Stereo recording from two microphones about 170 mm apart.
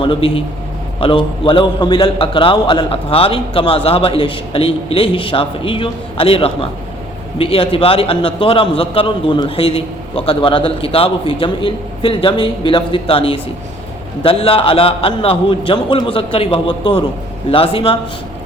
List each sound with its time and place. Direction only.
0.0 s a man's voice: 30° left (ahead or behind)